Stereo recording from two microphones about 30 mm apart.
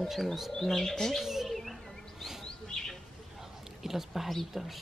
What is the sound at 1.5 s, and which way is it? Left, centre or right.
Insect, centre.